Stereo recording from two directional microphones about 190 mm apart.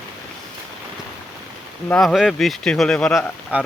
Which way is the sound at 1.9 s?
5° left (ahead or behind).